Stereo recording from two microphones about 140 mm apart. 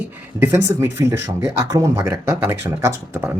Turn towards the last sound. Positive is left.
turn(degrees=-15)  # may be behind; listen again after turning